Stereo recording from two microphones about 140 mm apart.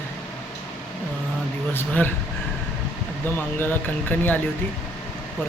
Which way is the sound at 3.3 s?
15° left (ahead or behind).